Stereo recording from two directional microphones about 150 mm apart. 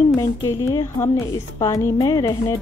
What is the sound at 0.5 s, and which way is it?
A woman's voice, 20° left (ahead or behind).